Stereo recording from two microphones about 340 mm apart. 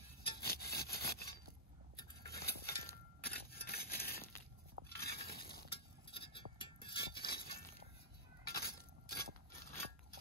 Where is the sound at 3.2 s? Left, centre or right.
Left.